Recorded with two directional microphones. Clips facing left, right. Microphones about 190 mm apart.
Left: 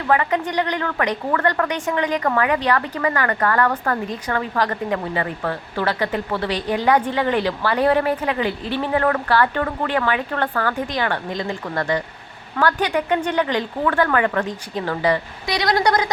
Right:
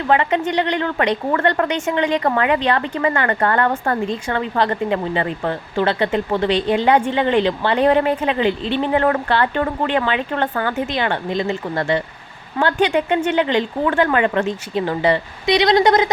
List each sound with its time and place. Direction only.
0.1 s a woman's voice: 25° right (ahead or behind)